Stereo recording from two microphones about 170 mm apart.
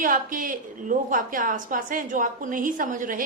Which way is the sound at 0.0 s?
55° right (ahead or behind).